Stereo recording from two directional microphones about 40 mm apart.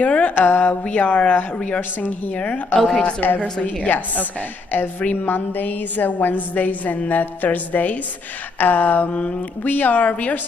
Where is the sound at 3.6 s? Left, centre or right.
Left.